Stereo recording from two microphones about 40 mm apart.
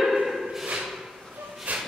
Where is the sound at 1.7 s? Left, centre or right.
Right.